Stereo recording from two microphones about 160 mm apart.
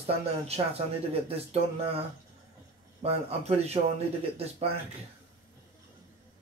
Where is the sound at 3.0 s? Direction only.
40° right (ahead or behind).